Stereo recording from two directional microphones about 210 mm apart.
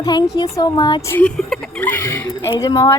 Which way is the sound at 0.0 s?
20° left (ahead or behind).